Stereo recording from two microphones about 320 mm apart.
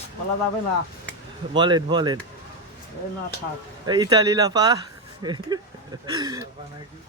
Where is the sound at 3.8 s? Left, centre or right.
Centre.